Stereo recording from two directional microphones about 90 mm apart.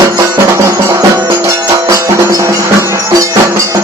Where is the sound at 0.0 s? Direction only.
35° right (ahead or behind).